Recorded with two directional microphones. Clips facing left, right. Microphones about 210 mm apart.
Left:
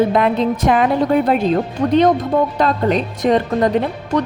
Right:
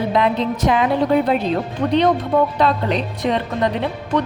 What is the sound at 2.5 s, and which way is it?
A woman's voice, 45° left (ahead or behind).